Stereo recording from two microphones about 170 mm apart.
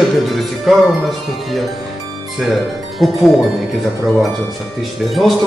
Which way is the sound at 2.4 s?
Centre (ahead or behind).